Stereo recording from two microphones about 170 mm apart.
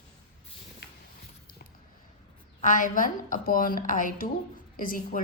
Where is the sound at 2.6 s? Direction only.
50° left (ahead or behind).